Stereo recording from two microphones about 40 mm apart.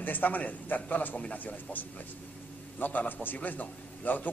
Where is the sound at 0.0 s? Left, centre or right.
Left.